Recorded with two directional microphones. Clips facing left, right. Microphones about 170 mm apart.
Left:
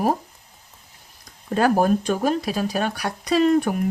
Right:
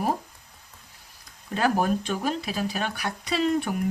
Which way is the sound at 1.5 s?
45° left (ahead or behind).